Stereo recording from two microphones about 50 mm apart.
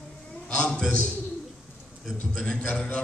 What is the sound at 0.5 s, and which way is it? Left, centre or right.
Speech, left.